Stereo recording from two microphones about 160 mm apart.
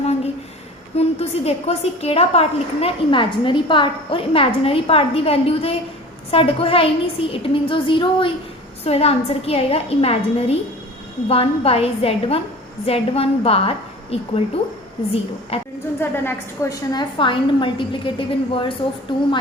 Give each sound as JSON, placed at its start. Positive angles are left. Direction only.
{"t": 0.9, "sound": "a woman's voice", "side_deg": 40}
{"t": 16.0, "sound": "a woman's voice", "side_deg": 15}
{"t": 16.9, "sound": "a woman's voice", "side_deg": 30}